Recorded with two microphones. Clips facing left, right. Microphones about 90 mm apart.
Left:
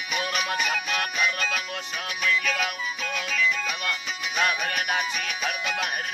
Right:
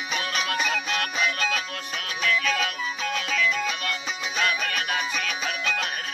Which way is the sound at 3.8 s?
15° left (ahead or behind).